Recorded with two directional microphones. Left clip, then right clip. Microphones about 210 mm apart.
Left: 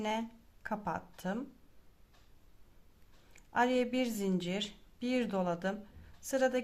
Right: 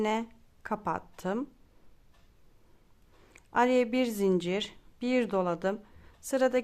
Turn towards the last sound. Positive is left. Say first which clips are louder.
# right 5 dB
turn(degrees=-30)  # may be behind; listen again after turning